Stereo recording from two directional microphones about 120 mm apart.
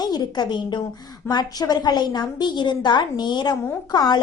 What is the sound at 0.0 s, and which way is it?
A woman's voice, 35° left (ahead or behind).